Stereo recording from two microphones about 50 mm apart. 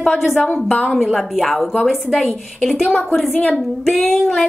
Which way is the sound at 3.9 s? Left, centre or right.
Centre.